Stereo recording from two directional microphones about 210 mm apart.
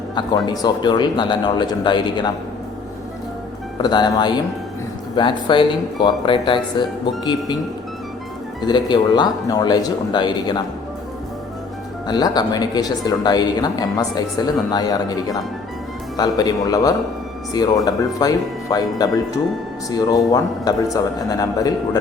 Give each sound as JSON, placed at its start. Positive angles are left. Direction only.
{"t": 0.2, "sound": "speech", "side_deg": 20}
{"t": 3.8, "sound": "speech", "side_deg": 20}
{"t": 8.6, "sound": "speech", "side_deg": 20}
{"t": 12.0, "sound": "speech", "side_deg": 20}